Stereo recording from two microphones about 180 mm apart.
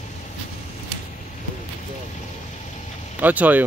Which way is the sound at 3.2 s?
10° right (ahead or behind).